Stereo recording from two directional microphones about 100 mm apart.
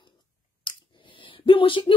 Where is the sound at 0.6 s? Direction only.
55° left (ahead or behind).